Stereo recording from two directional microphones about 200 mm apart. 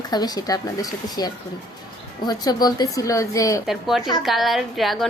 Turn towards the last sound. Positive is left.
turn(degrees=0)  # may be behind; listen again after turning